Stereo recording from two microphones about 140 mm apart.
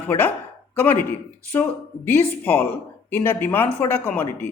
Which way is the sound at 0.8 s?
10° left (ahead or behind).